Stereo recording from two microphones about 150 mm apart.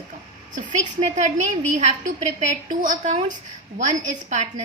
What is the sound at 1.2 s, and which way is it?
A woman's voice, 55° right (ahead or behind).